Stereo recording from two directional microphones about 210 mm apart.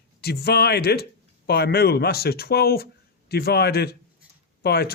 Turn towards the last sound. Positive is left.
turn(degrees=50)  # may be behind; listen again after turning